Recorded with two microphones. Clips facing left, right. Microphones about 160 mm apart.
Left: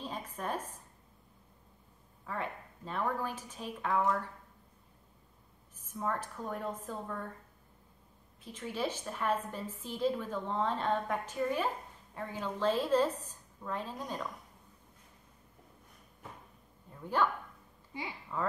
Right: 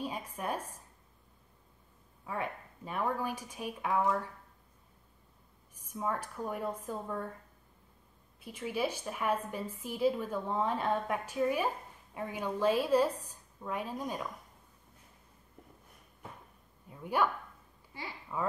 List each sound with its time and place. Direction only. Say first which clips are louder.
0.0 s speech: right 2 dB; 10° right (ahead or behind)
2.2 s a woman's voice: right 1 dB; 10° right (ahead or behind)
5.9 s a woman's voice: even; 10° right (ahead or behind)
8.4 s a woman's voice: right 2 dB; 10° right (ahead or behind)
16.9 s a woman's voice: right 1 dB; 10° right (ahead or behind)
17.9 s speech: left 3 dB; 15° left (ahead or behind)
18.3 s a woman's voice: even; 10° right (ahead or behind)